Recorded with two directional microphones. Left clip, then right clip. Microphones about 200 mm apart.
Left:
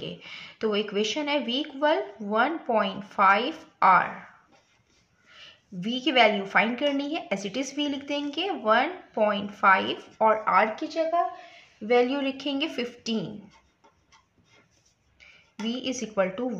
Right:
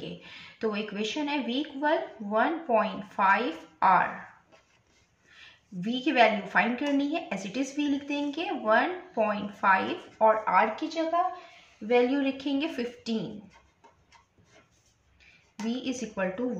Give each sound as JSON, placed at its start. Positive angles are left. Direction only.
{"t": 0.2, "sound": "a woman's voice", "side_deg": 50}
{"t": 5.4, "sound": "a woman's voice", "side_deg": 50}
{"t": 11.9, "sound": "a woman's voice", "side_deg": 50}
{"t": 15.7, "sound": "a woman's voice", "side_deg": 50}